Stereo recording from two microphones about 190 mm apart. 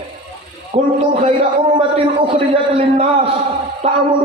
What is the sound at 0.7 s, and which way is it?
Speech, 35° right (ahead or behind).